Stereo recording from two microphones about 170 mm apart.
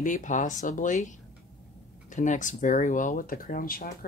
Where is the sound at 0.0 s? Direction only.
50° left (ahead or behind).